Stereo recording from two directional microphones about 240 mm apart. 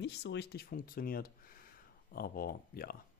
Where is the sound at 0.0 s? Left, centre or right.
Left.